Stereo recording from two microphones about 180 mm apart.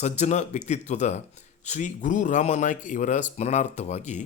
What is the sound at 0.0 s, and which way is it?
Speech, 40° left (ahead or behind).